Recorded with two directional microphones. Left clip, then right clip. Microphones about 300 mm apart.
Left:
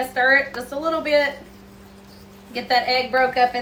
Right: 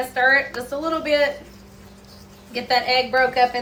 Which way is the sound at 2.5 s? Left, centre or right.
Centre.